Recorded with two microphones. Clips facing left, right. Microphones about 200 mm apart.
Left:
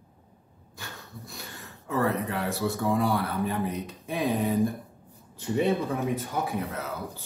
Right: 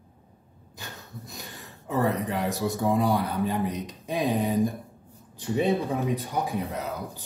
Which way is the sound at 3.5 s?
15° right (ahead or behind).